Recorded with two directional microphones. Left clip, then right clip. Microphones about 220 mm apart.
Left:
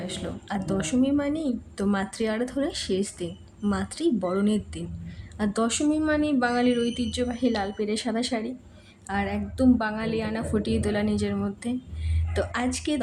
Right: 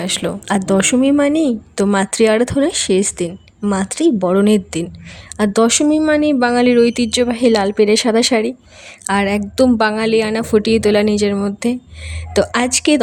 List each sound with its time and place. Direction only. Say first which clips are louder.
0.0 s speech: right 14 dB; 50° right (ahead or behind)